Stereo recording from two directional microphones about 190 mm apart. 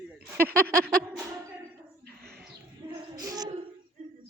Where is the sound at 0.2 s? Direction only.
10° right (ahead or behind).